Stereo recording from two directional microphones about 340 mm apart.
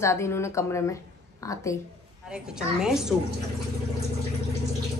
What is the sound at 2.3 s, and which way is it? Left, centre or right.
Speech, centre.